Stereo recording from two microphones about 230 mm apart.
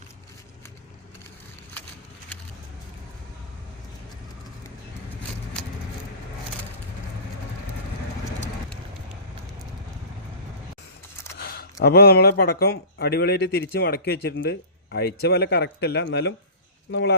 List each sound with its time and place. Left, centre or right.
11.3 s speech: left